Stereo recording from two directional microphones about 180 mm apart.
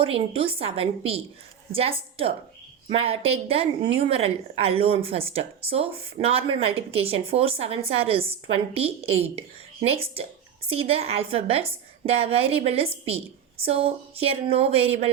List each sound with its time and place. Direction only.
0.0 s a woman's voice: 30° right (ahead or behind)